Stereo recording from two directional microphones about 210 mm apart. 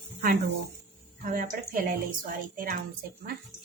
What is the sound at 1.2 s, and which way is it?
Speech, 40° right (ahead or behind).